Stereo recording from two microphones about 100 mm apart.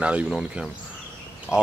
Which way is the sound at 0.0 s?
10° right (ahead or behind).